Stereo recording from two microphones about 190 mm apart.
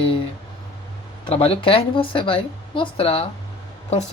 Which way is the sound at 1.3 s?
30° left (ahead or behind).